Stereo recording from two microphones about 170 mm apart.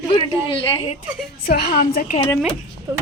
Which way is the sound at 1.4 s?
60° left (ahead or behind).